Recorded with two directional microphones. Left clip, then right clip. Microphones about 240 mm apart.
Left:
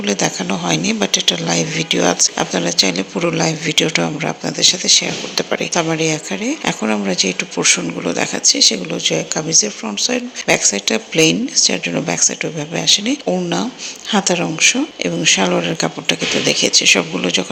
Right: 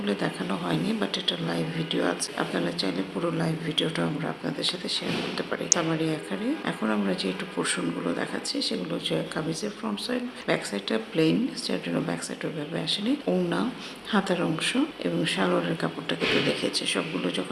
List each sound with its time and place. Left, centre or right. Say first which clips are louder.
0.0 s speech: left 11 dB; left